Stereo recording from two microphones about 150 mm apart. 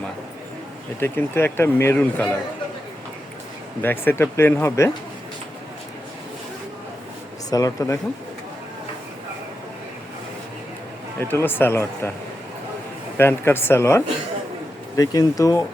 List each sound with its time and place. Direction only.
0.9 s speech: 15° left (ahead or behind)
3.8 s speech: 15° left (ahead or behind)
7.5 s speech: 20° left (ahead or behind)
11.2 s speech: 15° left (ahead or behind)
13.1 s speech: 15° left (ahead or behind)